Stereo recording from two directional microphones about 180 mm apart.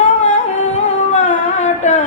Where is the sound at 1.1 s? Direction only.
40° left (ahead or behind).